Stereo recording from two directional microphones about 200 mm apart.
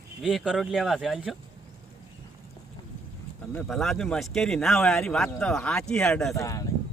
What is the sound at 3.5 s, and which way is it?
Speech, centre (ahead or behind).